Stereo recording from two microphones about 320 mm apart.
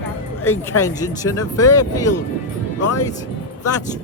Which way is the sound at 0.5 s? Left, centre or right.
Left.